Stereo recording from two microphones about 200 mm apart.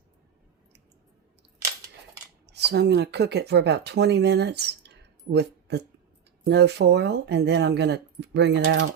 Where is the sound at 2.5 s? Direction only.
55° right (ahead or behind).